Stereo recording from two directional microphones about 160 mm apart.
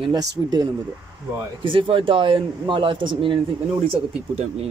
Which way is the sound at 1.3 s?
30° right (ahead or behind).